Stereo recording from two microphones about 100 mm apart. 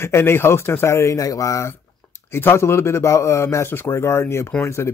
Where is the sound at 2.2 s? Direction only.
25° left (ahead or behind).